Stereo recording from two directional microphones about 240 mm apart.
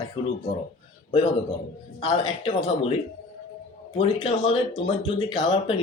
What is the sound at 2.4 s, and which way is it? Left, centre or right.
Speech, left.